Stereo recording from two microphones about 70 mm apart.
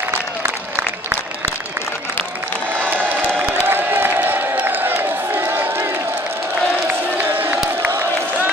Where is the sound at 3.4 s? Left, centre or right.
Right.